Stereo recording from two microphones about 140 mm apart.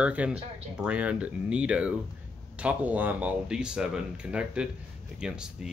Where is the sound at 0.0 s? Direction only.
10° right (ahead or behind).